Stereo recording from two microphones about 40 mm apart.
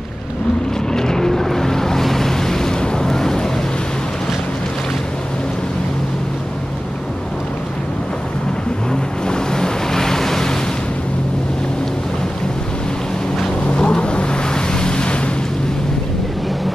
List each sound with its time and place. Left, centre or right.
0.9 s vehicle: centre
9.3 s waves: centre
13.7 s vehicle: left